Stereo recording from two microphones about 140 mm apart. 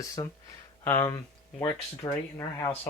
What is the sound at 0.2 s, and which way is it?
Speech, 30° left (ahead or behind).